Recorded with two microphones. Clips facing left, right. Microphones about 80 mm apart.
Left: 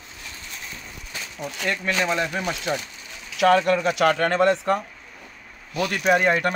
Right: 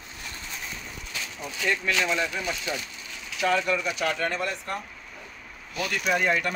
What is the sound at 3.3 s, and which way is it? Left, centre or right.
Speech, left.